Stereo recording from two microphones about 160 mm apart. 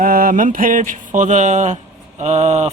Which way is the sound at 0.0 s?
60° right (ahead or behind).